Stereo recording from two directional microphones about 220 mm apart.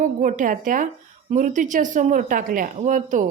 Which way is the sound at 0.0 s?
35° right (ahead or behind).